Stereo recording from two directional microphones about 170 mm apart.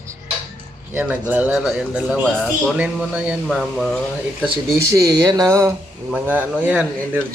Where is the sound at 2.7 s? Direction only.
5° right (ahead or behind).